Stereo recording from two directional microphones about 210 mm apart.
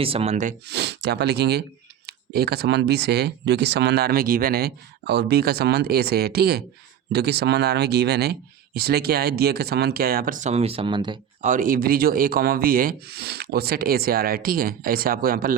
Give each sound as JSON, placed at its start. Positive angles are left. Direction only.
{"t": 0.0, "sound": "speech", "side_deg": -30}
{"t": 0.7, "sound": "speech", "side_deg": -55}
{"t": 11.4, "sound": "speech", "side_deg": -40}